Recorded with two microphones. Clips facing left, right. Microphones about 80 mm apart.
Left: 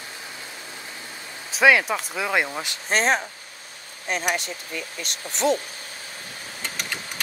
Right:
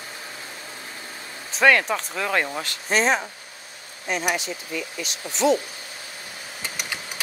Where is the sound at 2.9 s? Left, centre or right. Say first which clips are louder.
Right 1 dB; left.